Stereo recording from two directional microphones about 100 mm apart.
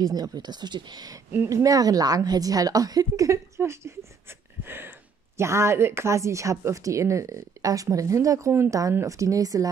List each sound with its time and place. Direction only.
0.0 s speech: 40° right (ahead or behind)
1.3 s speech: 20° right (ahead or behind)
1.6 s a woman's voice: 35° right (ahead or behind)